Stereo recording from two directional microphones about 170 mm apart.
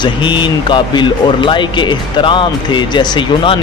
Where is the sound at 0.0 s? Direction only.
25° left (ahead or behind).